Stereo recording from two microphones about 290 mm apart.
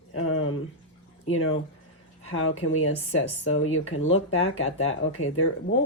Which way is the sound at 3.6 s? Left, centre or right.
Left.